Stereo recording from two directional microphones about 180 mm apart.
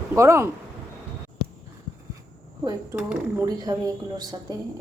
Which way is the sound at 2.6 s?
20° right (ahead or behind).